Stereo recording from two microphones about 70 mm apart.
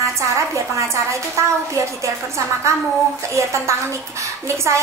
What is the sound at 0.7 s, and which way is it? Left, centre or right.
A woman's voice, right.